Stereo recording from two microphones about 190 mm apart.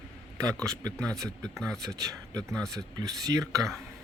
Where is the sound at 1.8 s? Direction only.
20° right (ahead or behind).